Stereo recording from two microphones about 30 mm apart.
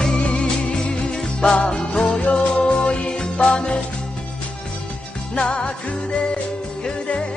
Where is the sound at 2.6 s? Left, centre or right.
Left.